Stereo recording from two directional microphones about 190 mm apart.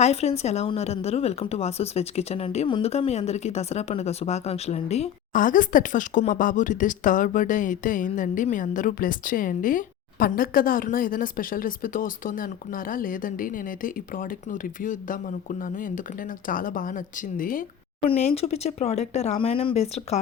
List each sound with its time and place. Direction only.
0.0 s a woman's voice: 35° left (ahead or behind)
18.0 s speech: 30° left (ahead or behind)